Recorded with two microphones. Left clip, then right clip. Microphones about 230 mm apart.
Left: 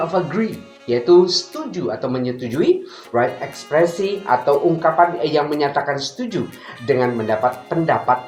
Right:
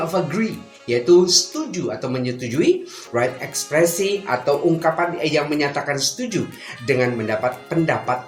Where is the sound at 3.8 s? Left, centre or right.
Right.